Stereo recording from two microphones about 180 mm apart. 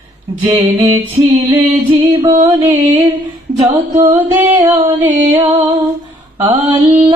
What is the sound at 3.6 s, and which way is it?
Music, 20° right (ahead or behind).